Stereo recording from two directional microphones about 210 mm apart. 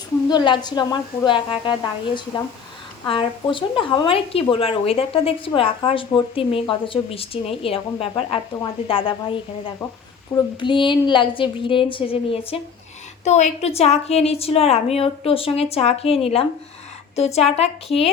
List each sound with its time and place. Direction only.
0.3 s speech: 20° left (ahead or behind)